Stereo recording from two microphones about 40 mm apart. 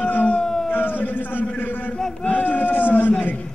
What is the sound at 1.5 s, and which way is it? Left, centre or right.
Speech, left.